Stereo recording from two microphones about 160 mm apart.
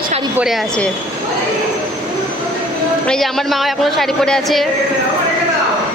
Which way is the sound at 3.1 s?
Centre (ahead or behind).